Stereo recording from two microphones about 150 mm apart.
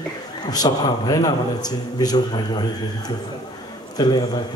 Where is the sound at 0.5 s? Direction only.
25° left (ahead or behind).